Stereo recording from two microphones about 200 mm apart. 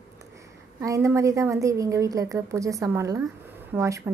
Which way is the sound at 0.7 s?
15° right (ahead or behind).